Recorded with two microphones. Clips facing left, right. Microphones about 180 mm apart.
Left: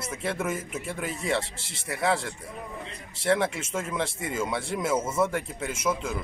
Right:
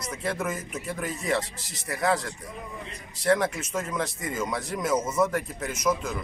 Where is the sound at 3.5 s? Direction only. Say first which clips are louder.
Right 1 dB; 25° left (ahead or behind).